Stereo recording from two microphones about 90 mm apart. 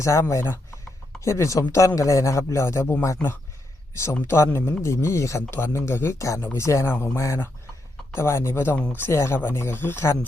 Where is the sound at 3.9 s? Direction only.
30° left (ahead or behind).